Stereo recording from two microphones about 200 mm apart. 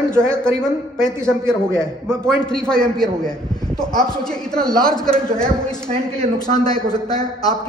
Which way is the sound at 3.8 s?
20° left (ahead or behind).